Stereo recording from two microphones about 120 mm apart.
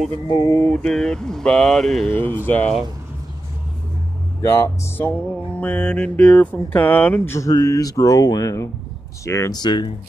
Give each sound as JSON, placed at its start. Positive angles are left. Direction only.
{"t": 0.3, "sound": "speech", "side_deg": 30}
{"t": 0.6, "sound": "mantra", "side_deg": 10}
{"t": 2.0, "sound": "music", "side_deg": 15}
{"t": 4.4, "sound": "music", "side_deg": 25}
{"t": 7.3, "sound": "speech", "side_deg": 30}
{"t": 9.6, "sound": "speech", "side_deg": 40}